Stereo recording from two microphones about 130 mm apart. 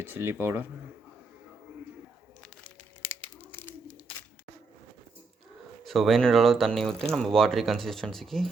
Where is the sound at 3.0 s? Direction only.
15° left (ahead or behind).